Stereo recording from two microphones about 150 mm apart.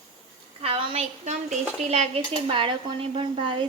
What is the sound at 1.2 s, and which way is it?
Speech, 50° right (ahead or behind).